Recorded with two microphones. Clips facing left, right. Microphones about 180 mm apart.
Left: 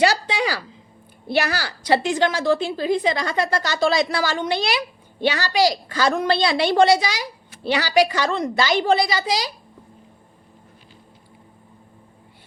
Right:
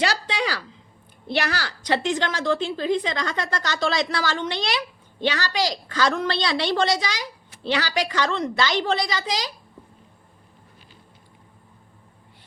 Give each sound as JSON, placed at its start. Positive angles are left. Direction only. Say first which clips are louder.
{"t": 0.0, "sound": "a woman's voice", "louder": "left 5 dB", "side_deg": 5}